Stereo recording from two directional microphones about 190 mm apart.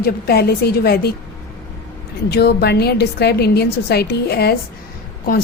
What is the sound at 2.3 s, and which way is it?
A woman's voice, 60° left (ahead or behind).